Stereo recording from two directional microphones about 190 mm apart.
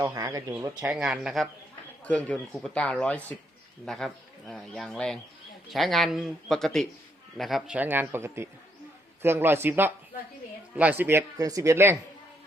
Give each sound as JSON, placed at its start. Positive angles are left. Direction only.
{"t": 0.0, "sound": "speech", "side_deg": -20}
{"t": 0.8, "sound": "speech", "side_deg": -5}